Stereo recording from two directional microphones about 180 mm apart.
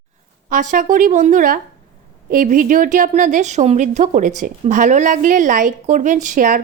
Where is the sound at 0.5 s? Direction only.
45° right (ahead or behind).